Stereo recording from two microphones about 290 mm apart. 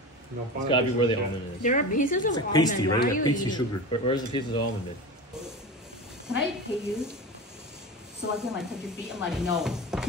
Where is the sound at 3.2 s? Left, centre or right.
Centre.